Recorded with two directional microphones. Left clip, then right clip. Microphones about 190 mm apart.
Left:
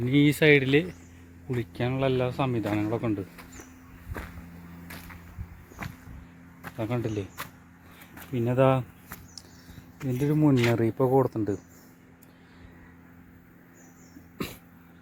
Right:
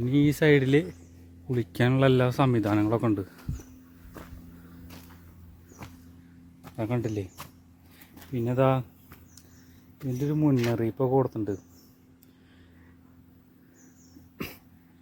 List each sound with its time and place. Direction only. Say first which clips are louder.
0.0 s speech: left 2 dB; 10° right (ahead or behind)
1.7 s a man's voice: right 4 dB; 60° right (ahead or behind); by 3.2 s 40° right (ahead or behind)
6.7 s speech: even; 25° right (ahead or behind)
8.3 s speech: left 2 dB; 5° right (ahead or behind)
10.2 s speech: left 2 dB; centre (ahead or behind)
14.3 s dog: left 2 dB; 5° right (ahead or behind)